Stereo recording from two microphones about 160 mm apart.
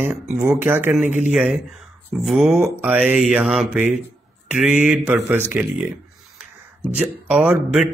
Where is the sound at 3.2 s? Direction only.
5° right (ahead or behind).